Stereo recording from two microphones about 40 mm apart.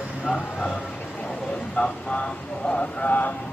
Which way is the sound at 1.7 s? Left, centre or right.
Left.